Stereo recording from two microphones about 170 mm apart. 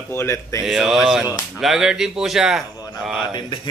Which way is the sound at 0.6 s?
5° right (ahead or behind).